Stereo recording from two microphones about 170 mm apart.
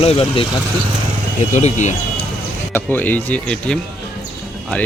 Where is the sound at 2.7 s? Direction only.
10° left (ahead or behind).